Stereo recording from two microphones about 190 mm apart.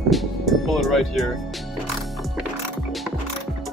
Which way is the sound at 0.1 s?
Centre (ahead or behind).